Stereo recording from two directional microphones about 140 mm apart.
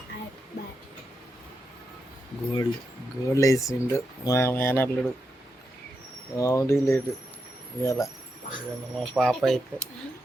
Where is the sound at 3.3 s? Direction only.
20° left (ahead or behind).